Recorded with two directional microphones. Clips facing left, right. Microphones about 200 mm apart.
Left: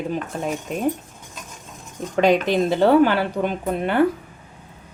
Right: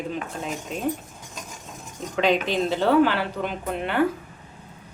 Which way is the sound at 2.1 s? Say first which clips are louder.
Left 5 dB; 45° left (ahead or behind).